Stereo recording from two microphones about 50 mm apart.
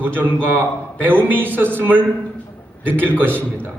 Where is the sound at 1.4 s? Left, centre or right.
Right.